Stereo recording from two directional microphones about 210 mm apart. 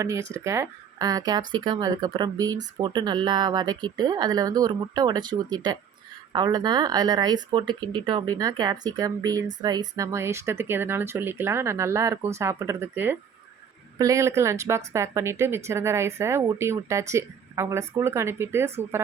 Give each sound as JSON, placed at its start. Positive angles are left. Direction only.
{"t": 0.0, "sound": "speech", "side_deg": -15}